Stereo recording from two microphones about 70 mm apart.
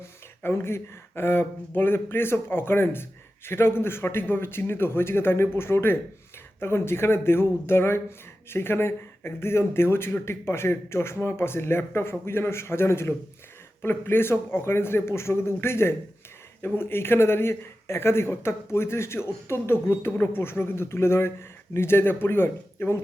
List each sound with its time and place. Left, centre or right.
0.0 s a man's voice: left